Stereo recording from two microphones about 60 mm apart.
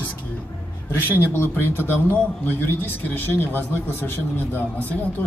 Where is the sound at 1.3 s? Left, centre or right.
Left.